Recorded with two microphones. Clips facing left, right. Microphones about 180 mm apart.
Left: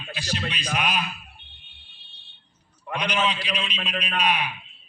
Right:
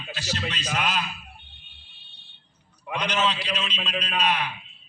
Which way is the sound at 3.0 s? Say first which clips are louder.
Even; 10° left (ahead or behind).